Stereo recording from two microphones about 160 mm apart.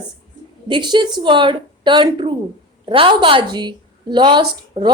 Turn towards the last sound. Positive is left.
turn(degrees=-30)  # may be behind; listen again after turning